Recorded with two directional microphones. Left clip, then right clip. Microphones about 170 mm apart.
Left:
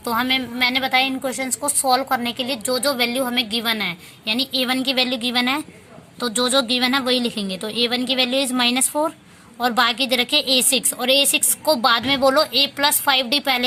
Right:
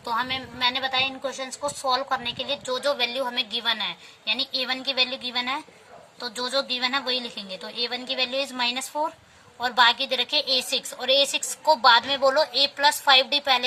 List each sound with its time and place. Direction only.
0.0 s a woman's voice: 35° left (ahead or behind)